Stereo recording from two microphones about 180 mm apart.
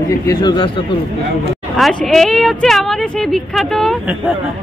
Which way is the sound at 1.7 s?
Centre (ahead or behind).